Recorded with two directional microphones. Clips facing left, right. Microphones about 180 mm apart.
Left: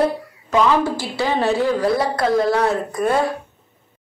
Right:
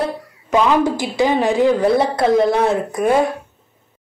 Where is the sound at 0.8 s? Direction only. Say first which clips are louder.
Right 5 dB; 15° right (ahead or behind).